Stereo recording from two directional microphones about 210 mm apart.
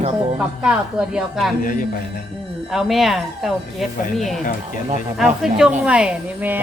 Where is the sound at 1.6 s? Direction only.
40° left (ahead or behind).